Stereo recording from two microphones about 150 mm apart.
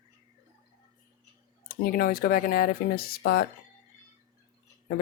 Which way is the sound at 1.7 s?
75° left (ahead or behind).